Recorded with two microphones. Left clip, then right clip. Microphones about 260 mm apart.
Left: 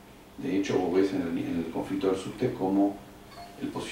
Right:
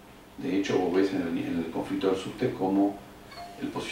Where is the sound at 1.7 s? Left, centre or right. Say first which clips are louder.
Right 1 dB; right.